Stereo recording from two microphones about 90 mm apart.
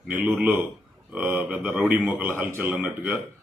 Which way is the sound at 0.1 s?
15° right (ahead or behind).